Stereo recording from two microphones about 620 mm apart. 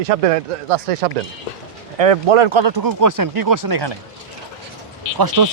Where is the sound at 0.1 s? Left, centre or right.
Right.